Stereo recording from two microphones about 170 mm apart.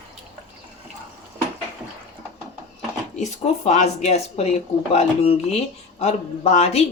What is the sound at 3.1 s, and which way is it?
Speech, 45° left (ahead or behind).